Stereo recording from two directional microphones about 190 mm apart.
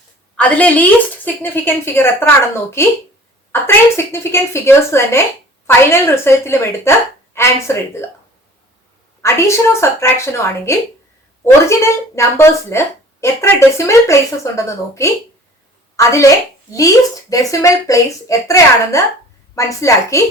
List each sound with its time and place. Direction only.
0.3 s speech: 5° left (ahead or behind)
9.2 s speech: 15° left (ahead or behind)
12.1 s speech: 15° left (ahead or behind)